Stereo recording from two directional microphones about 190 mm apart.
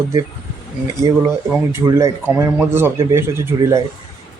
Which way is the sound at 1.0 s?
25° right (ahead or behind).